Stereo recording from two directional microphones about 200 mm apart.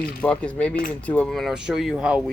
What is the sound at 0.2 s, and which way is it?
Speech, 5° left (ahead or behind).